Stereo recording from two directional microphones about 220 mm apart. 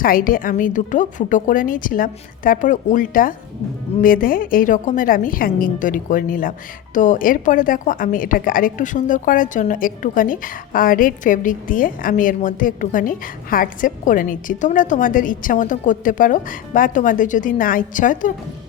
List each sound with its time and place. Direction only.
0.0 s a woman's voice: 40° left (ahead or behind)